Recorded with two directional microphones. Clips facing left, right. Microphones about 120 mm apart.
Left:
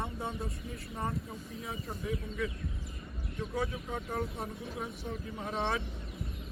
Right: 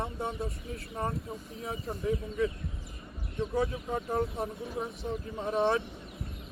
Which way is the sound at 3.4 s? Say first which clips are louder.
Right 6 dB; 25° right (ahead or behind).